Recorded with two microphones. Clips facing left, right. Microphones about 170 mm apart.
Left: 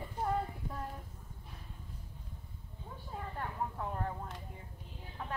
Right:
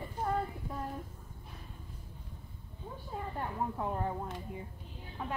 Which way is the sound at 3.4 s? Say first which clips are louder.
Right 3 dB; 20° right (ahead or behind).